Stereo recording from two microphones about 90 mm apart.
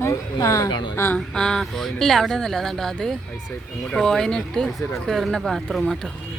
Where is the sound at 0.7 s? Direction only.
60° left (ahead or behind).